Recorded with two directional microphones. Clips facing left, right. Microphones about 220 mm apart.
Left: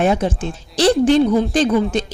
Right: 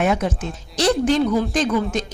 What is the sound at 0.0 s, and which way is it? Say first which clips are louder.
A woman's voice: left 3 dB; 30° left (ahead or behind).